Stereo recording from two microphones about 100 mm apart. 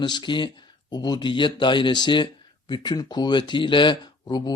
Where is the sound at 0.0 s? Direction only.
50° left (ahead or behind).